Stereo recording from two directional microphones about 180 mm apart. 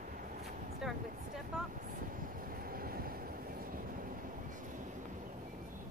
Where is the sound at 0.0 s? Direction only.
50° right (ahead or behind).